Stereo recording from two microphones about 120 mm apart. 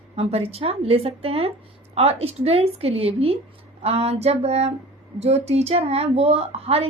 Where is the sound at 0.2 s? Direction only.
55° right (ahead or behind).